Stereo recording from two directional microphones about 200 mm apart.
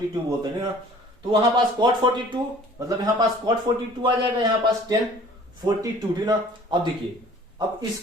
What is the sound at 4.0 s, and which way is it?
Speech, 20° right (ahead or behind).